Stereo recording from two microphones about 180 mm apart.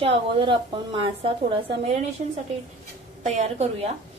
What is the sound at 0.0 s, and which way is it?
A woman's voice, 30° right (ahead or behind).